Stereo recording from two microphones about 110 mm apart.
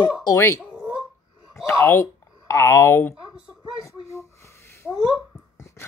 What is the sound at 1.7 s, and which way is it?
Speech, 25° left (ahead or behind).